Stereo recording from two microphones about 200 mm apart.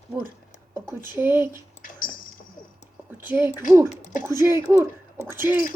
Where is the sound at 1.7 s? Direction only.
45° left (ahead or behind).